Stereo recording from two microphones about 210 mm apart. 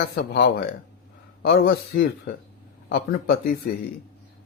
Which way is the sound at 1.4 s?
50° left (ahead or behind).